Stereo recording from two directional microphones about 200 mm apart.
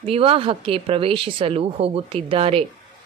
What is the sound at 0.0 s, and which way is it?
A woman's voice, 30° right (ahead or behind).